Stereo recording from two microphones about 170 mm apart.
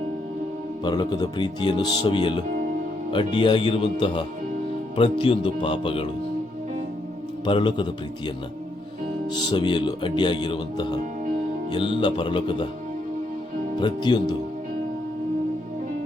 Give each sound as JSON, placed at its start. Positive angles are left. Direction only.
{"t": 0.9, "sound": "speech", "side_deg": 25}
{"t": 7.4, "sound": "speech", "side_deg": 30}
{"t": 9.3, "sound": "speech", "side_deg": 25}
{"t": 13.7, "sound": "speech", "side_deg": 25}